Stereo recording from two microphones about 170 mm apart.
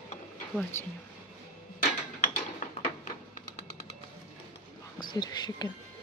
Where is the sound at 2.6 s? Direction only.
45° left (ahead or behind).